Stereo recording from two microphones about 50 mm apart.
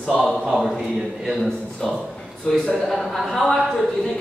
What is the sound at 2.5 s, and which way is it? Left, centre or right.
A man's voice, centre.